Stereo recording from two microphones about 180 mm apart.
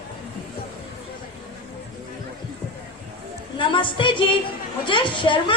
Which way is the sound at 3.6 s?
25° left (ahead or behind).